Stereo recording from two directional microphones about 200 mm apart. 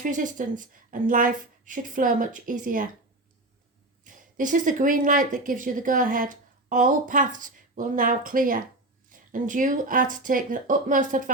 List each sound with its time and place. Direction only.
0.0 s speech: 40° right (ahead or behind)
4.0 s speech: 40° right (ahead or behind)